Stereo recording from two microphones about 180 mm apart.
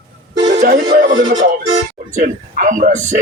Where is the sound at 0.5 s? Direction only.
45° right (ahead or behind).